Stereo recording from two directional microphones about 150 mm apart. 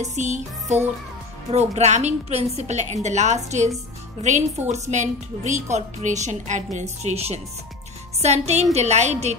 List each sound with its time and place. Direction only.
0.0 s a woman's voice: 50° right (ahead or behind)